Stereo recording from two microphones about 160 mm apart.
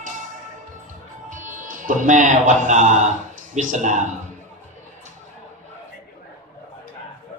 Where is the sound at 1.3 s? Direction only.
50° right (ahead or behind).